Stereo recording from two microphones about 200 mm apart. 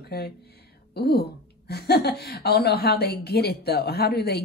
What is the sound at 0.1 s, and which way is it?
A woman's voice, 55° left (ahead or behind).